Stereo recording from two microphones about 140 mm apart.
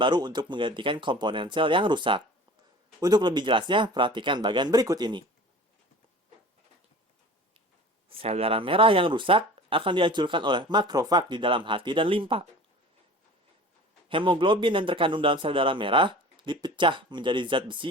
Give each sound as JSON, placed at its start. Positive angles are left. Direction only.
{"t": 0.0, "sound": "speech", "side_deg": -35}
{"t": 8.2, "sound": "speech", "side_deg": -45}
{"t": 14.1, "sound": "speech", "side_deg": -35}